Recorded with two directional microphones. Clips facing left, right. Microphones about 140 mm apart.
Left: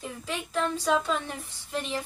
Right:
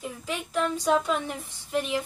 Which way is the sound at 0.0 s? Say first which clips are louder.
Right 1 dB; 10° right (ahead or behind).